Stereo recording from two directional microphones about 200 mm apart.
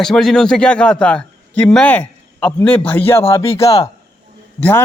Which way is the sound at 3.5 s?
30° left (ahead or behind).